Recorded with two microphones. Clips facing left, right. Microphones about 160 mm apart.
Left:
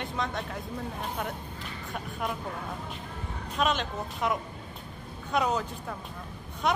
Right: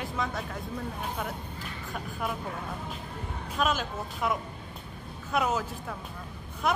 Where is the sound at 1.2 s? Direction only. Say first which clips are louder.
Even; centre (ahead or behind).